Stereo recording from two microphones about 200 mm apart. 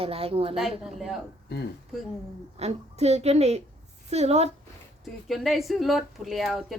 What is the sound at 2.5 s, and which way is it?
A woman's voice, 30° right (ahead or behind).